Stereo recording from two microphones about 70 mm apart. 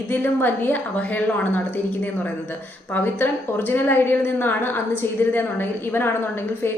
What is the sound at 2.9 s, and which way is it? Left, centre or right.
A woman's voice, left.